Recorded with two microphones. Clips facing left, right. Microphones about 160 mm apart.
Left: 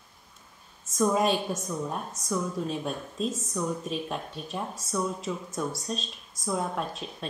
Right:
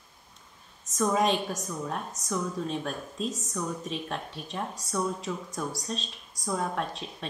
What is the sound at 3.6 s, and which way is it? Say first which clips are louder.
Speech: left 3 dB; 5° left (ahead or behind).